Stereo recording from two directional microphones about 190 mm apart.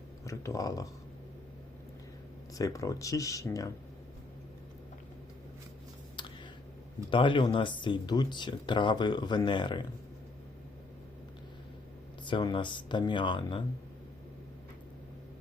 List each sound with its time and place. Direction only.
0.3 s speech: 15° left (ahead or behind)
2.6 s speech: 15° left (ahead or behind)
7.1 s speech: 25° left (ahead or behind)
12.2 s speech: 25° left (ahead or behind)